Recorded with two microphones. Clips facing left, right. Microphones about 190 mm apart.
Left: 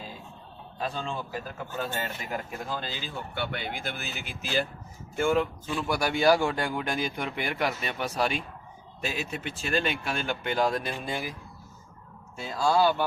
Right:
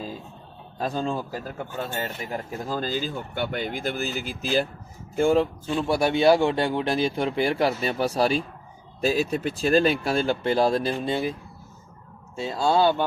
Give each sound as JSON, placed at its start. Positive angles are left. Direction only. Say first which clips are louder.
{"t": 0.8, "sound": "speech", "louder": "right 6 dB", "side_deg": -40}
{"t": 12.4, "sound": "speech", "louder": "right 3 dB", "side_deg": -25}